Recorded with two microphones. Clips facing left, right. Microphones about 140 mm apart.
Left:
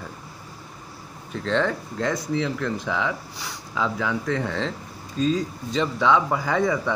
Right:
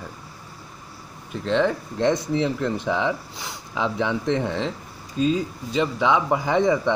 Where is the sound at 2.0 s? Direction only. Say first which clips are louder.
Right 4 dB; 25° right (ahead or behind).